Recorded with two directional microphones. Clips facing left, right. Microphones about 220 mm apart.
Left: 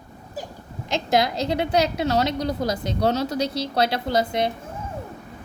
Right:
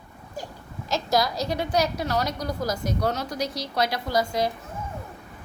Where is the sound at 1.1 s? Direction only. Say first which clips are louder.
Left 3 dB; 25° left (ahead or behind).